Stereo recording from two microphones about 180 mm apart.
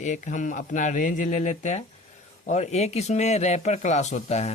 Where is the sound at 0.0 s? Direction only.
45° left (ahead or behind).